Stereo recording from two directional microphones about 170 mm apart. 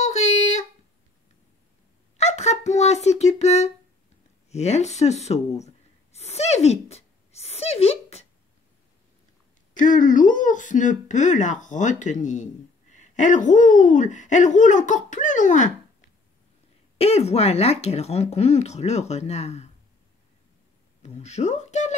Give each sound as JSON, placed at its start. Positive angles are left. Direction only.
{"t": 0.0, "sound": "a sound", "side_deg": 40}
{"t": 2.1, "sound": "speech", "side_deg": 40}
{"t": 6.1, "sound": "a sound", "side_deg": 40}
{"t": 9.8, "sound": "speech", "side_deg": 50}
{"t": 17.0, "sound": "speech", "side_deg": 40}
{"t": 21.0, "sound": "speech", "side_deg": 40}